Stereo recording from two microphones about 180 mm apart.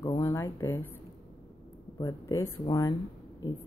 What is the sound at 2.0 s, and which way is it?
Speech, 15° left (ahead or behind).